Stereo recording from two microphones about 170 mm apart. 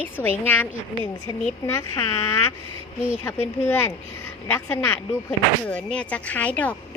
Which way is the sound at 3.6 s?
15° left (ahead or behind).